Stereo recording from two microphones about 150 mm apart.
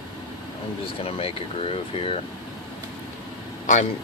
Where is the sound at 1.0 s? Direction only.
40° left (ahead or behind).